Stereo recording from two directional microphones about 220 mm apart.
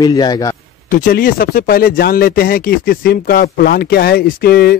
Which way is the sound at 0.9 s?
40° left (ahead or behind).